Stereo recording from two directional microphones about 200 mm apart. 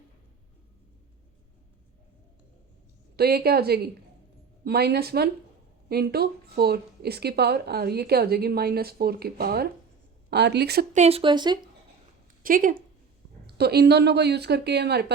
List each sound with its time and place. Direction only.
3.2 s a woman's voice: 50° right (ahead or behind)
10.9 s speech: 30° right (ahead or behind)
12.4 s a woman's voice: 45° right (ahead or behind)